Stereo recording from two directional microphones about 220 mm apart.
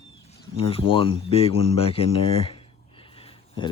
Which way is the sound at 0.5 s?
25° left (ahead or behind).